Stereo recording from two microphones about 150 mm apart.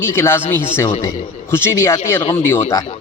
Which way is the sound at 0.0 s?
15° left (ahead or behind).